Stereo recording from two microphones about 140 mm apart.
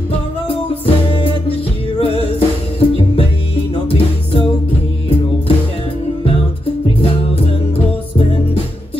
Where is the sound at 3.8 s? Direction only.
40° left (ahead or behind).